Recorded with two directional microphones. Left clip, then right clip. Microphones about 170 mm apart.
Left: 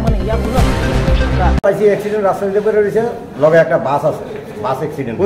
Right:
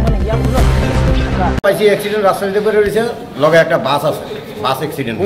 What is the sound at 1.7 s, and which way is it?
Speech, 5° left (ahead or behind).